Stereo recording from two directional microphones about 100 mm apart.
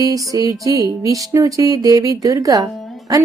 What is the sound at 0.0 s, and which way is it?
Speech, 35° right (ahead or behind).